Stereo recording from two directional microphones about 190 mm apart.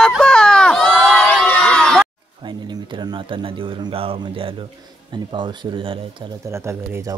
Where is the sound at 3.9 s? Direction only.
30° right (ahead or behind).